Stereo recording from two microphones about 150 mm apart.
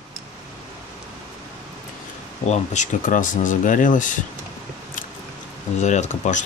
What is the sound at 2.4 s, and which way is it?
Speech, 50° left (ahead or behind).